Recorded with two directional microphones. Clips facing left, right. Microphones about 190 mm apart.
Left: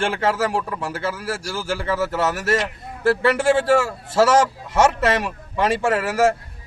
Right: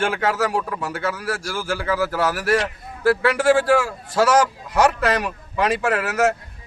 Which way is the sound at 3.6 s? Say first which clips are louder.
Even; 25° left (ahead or behind).